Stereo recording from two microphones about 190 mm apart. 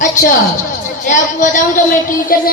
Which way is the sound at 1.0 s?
40° left (ahead or behind).